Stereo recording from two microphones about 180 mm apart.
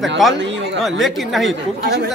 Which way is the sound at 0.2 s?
Centre (ahead or behind).